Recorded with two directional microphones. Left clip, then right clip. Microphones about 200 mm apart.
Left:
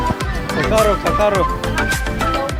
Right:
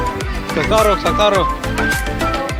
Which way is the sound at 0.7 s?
45° right (ahead or behind).